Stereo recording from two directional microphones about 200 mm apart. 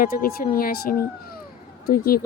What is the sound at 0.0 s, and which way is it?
Speech, 45° left (ahead or behind).